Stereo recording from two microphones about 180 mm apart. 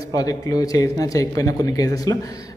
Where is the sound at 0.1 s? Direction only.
20° left (ahead or behind).